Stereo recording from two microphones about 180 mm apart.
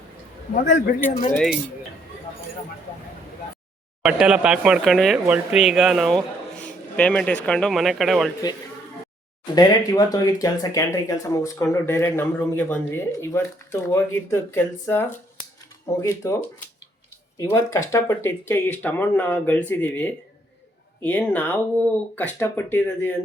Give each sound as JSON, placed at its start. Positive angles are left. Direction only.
{"t": 0.5, "sound": "a man's voice", "side_deg": 45}
{"t": 4.0, "sound": "speech", "side_deg": -5}
{"t": 9.6, "sound": "speech", "side_deg": 20}